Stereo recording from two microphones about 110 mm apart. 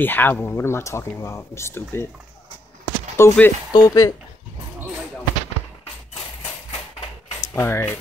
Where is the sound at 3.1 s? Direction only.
25° left (ahead or behind).